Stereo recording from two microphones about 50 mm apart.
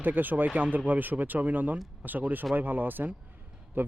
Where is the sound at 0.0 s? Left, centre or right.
Right.